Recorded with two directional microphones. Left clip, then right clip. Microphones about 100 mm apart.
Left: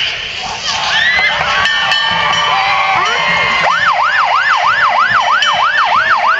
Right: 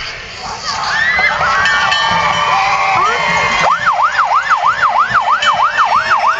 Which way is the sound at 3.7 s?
70° left (ahead or behind).